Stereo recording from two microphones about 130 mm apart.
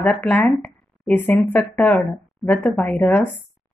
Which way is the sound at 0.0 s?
10° left (ahead or behind).